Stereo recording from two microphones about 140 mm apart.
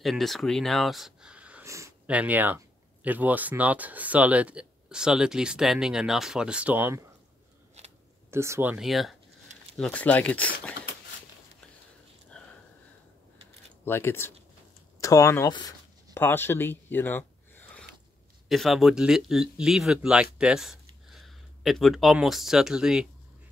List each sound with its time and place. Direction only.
0.0 s speech: centre (ahead or behind)
1.6 s a sound: 20° right (ahead or behind)
2.0 s speech: 10° right (ahead or behind)
7.8 s a sound: 50° right (ahead or behind)
8.3 s speech: 20° right (ahead or behind)
8.7 s speech: centre (ahead or behind)
13.8 s speech: 15° left (ahead or behind)
18.5 s speech: centre (ahead or behind)